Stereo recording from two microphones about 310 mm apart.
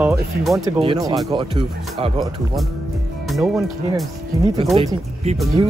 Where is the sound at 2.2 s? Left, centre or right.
Centre.